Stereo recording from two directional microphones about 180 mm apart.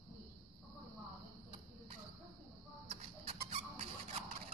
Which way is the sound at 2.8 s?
35° right (ahead or behind).